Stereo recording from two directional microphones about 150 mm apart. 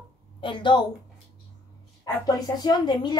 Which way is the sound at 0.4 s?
35° left (ahead or behind).